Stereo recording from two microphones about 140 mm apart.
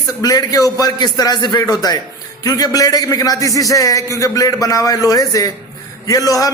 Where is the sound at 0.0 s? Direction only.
25° left (ahead or behind).